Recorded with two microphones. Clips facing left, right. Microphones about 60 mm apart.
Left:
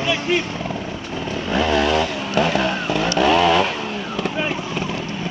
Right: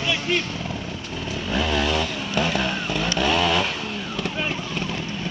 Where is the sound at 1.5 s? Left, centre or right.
Centre.